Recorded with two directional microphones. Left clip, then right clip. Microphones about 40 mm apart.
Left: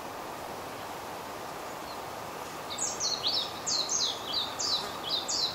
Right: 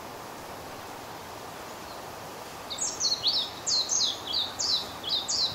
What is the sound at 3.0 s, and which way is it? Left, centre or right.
Bird, right.